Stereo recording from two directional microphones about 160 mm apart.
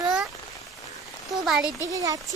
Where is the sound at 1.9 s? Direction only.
20° right (ahead or behind).